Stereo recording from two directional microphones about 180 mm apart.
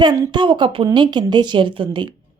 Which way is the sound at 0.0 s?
25° right (ahead or behind).